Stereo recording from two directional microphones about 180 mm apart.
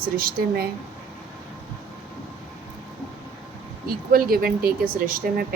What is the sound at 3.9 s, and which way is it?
Speech, 55° right (ahead or behind).